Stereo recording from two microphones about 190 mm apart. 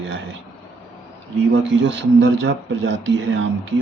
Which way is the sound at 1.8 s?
75° right (ahead or behind).